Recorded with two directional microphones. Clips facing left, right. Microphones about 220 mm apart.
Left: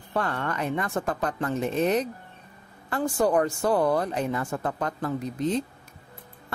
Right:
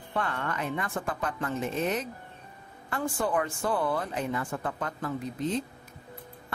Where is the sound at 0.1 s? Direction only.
40° left (ahead or behind).